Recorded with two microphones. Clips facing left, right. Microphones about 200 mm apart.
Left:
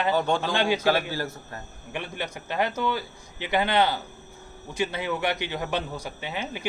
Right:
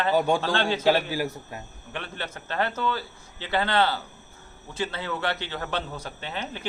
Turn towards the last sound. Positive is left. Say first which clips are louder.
# left 2 dB
turn(degrees=10)  # may be behind; listen again after turning